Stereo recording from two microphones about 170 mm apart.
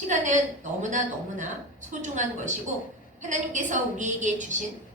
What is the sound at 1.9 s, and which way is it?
Speech, 45° right (ahead or behind).